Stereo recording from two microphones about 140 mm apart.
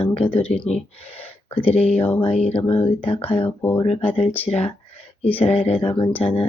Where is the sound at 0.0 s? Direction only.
40° left (ahead or behind).